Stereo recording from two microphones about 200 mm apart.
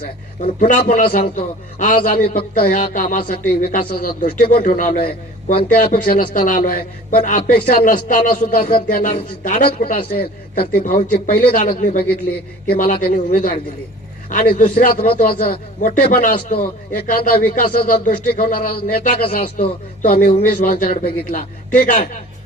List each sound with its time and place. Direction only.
0.7 s speech: 45° left (ahead or behind)